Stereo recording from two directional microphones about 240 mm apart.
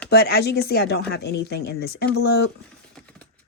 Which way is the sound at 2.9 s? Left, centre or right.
Centre.